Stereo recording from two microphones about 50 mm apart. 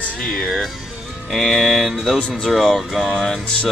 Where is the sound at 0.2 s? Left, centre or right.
Centre.